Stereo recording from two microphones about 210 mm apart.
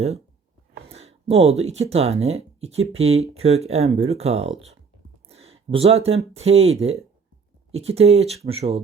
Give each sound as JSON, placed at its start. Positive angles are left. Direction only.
{"t": 0.9, "sound": "speech", "side_deg": -30}